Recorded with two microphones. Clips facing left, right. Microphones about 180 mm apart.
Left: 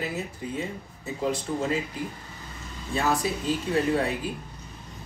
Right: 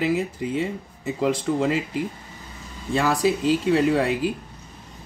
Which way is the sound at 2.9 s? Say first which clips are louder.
Right 5 dB; 90° right.